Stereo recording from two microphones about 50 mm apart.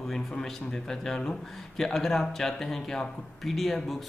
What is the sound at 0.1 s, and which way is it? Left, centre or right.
Speech, centre.